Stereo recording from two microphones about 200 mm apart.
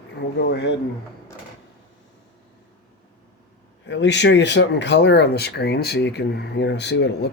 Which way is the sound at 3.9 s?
60° left (ahead or behind).